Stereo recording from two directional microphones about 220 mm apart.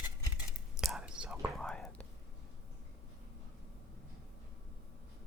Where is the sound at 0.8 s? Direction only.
Centre (ahead or behind).